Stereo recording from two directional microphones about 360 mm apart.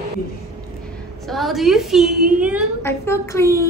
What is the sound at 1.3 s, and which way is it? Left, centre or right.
A woman's voice, centre.